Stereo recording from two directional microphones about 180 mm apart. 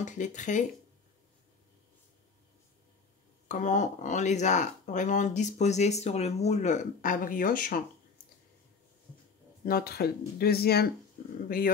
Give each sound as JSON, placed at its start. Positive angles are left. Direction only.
{"t": 0.0, "sound": "speech", "side_deg": 45}
{"t": 3.4, "sound": "speech", "side_deg": 40}
{"t": 9.7, "sound": "speech", "side_deg": 60}